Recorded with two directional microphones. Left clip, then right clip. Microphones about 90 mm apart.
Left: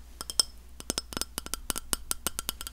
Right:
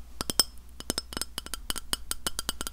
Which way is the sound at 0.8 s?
15° left (ahead or behind).